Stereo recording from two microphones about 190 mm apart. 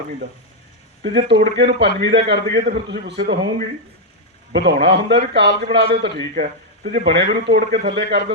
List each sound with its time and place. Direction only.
1.0 s a man's voice: 60° right (ahead or behind)
4.5 s a man's voice: 65° right (ahead or behind)
6.3 s a man's voice: 50° right (ahead or behind); by 8.2 s 65° right (ahead or behind)